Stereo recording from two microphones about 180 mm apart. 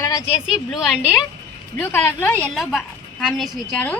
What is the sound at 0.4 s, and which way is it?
A woman's voice, 5° right (ahead or behind).